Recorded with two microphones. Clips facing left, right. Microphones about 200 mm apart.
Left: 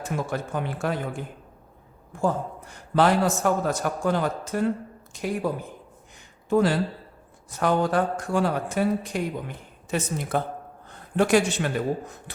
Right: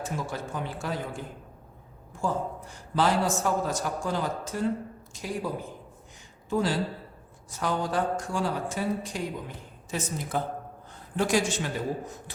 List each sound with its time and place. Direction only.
0.0 s a man's voice: 60° left (ahead or behind)
6.5 s a man's voice: 60° left (ahead or behind)